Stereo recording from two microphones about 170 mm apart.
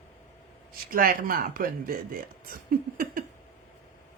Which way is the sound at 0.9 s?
55° right (ahead or behind).